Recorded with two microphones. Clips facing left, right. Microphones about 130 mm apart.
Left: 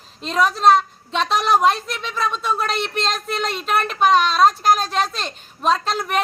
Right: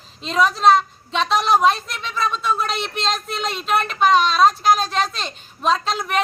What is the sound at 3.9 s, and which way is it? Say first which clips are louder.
A woman's voice: even; 5° left (ahead or behind).